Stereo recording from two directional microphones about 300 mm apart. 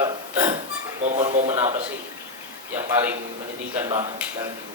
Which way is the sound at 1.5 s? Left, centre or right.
Centre.